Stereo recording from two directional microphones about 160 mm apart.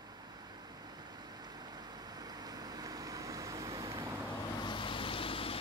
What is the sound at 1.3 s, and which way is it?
Vehicle, 25° right (ahead or behind).